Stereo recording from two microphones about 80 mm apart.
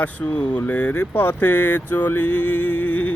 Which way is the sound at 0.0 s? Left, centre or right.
Centre.